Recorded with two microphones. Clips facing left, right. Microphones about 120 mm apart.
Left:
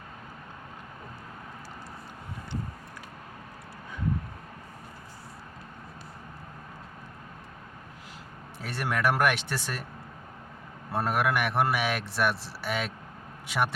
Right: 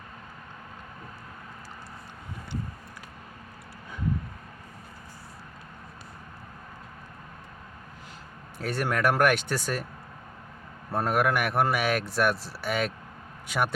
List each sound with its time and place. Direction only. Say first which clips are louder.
8.5 s a man's voice: right 3 dB; centre (ahead or behind)
10.9 s a man's voice: right 2 dB; centre (ahead or behind)